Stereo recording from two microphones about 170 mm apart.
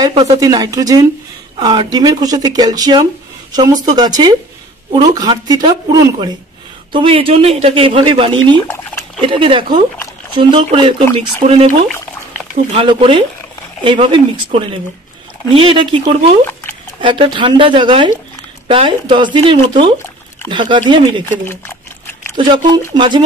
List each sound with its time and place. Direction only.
0.0 s speech: 25° right (ahead or behind)
8.6 s speech: 10° left (ahead or behind)
9.2 s speech: 30° right (ahead or behind)
12.7 s speech: 30° right (ahead or behind)
22.4 s speech: 30° right (ahead or behind)